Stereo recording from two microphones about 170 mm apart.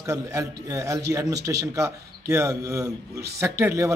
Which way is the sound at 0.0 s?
20° right (ahead or behind).